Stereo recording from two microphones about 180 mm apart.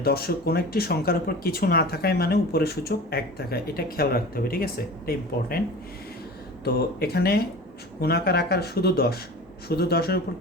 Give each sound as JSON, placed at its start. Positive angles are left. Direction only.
{"t": 0.0, "sound": "speech", "side_deg": 60}
{"t": 6.7, "sound": "speech", "side_deg": 60}